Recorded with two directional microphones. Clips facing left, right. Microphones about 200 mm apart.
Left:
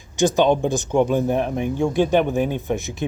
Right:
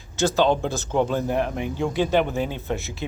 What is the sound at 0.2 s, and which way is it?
Speech, 15° left (ahead or behind).